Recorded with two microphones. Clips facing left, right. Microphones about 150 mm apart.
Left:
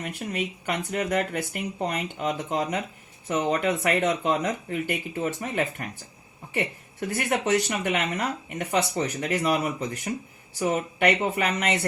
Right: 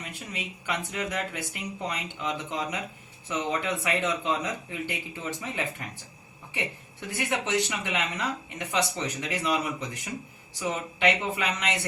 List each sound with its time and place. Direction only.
0.0 s speech: 55° left (ahead or behind)
7.2 s speech: 60° left (ahead or behind)